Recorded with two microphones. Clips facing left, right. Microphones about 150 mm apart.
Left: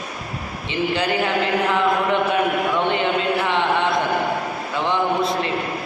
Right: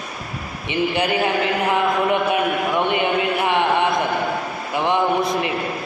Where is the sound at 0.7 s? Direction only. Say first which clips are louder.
Right 1 dB; 15° right (ahead or behind).